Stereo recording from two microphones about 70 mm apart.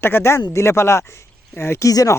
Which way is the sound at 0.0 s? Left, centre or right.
Left.